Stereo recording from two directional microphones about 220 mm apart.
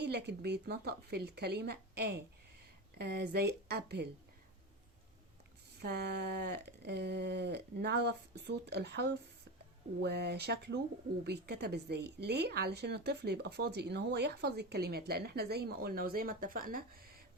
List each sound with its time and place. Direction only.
0.0 s a woman's voice: 50° right (ahead or behind)
5.8 s a woman's voice: 50° right (ahead or behind)